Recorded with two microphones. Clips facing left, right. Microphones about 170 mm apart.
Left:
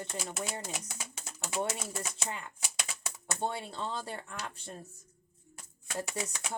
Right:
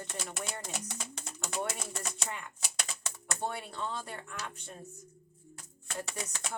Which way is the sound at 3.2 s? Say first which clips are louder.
Left 2 dB; 25° left (ahead or behind).